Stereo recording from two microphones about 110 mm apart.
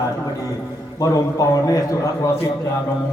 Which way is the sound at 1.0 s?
30° left (ahead or behind).